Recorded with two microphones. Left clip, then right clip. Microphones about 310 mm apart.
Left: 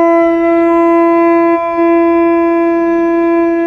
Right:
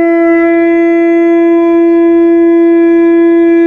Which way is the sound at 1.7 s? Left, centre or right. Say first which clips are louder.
Right 3 dB; right.